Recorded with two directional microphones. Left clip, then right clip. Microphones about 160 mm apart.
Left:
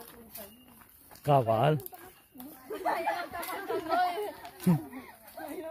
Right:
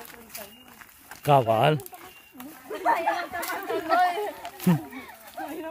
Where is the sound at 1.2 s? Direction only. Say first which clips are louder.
Right 5 dB; 10° right (ahead or behind).